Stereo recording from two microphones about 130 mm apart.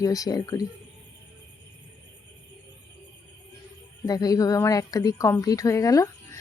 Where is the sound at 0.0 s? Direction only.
25° left (ahead or behind).